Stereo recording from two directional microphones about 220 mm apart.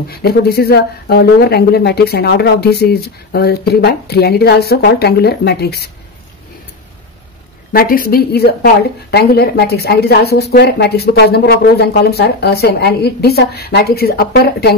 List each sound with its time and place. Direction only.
0.1 s speech: 45° left (ahead or behind)
7.7 s speech: 40° left (ahead or behind)